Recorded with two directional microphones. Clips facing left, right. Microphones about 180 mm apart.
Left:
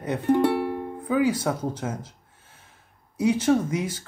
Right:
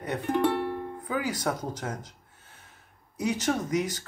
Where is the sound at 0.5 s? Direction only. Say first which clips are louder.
Left 3 dB; 5° left (ahead or behind).